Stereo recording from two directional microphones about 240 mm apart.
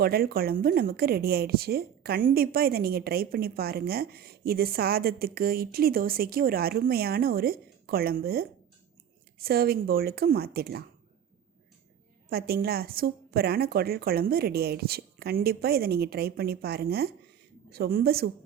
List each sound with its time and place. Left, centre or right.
0.0 s a woman's voice: right
12.3 s a woman's voice: right